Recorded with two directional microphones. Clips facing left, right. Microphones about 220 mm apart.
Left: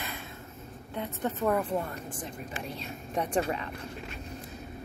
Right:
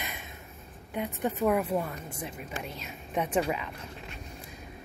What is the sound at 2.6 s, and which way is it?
Speech, 30° left (ahead or behind).